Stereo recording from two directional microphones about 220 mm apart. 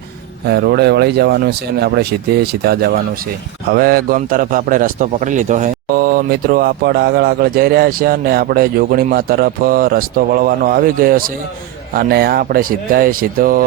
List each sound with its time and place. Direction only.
0.4 s a man's voice: 50° right (ahead or behind)